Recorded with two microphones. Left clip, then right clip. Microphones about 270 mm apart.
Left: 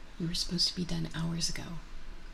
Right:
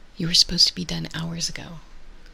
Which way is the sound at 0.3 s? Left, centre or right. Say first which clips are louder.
Right 14 dB; right.